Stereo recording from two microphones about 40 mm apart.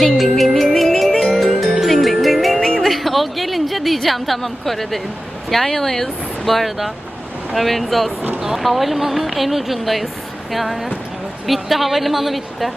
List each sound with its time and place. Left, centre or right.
0.0 s music: centre
2.6 s music: centre
5.5 s speech: centre